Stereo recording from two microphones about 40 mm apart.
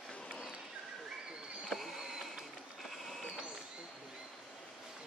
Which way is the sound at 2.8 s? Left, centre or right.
Centre.